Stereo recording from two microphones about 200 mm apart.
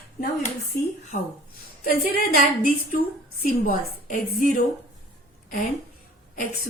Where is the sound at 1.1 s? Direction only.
40° left (ahead or behind).